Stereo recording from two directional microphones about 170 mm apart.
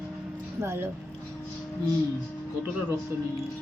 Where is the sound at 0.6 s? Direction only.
15° right (ahead or behind).